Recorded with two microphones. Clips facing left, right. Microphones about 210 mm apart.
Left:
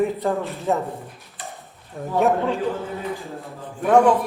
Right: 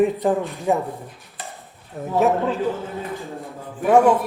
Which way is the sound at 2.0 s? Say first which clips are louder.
Right 1 dB; 5° right (ahead or behind).